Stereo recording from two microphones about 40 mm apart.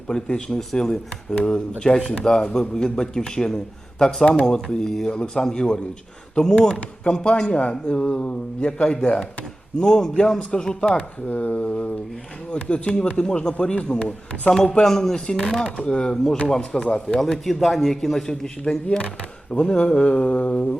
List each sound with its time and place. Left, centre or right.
0.1 s a man's voice: centre
1.8 s speech: left
2.2 s a man's voice: centre
9.8 s a man's voice: centre
10.9 s speech: left
14.5 s a man's voice: centre
15.6 s a man's voice: left
18.6 s speech: left